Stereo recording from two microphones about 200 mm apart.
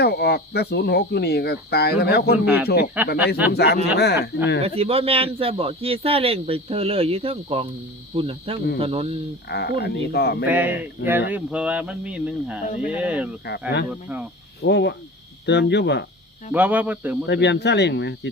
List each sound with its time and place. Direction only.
0.0 s speech: 55° left (ahead or behind)
2.4 s speech: 10° right (ahead or behind)
3.5 s speech: 55° left (ahead or behind)
4.6 s a man's voice: 30° right (ahead or behind)
9.5 s speech: 55° left (ahead or behind)
10.4 s speech: 10° right (ahead or behind)
13.4 s speech: 55° left (ahead or behind)
13.9 s speech: 5° right (ahead or behind)
14.6 s speech: 60° left (ahead or behind)
16.5 s speech: 10° right (ahead or behind)
17.2 s speech: 60° left (ahead or behind)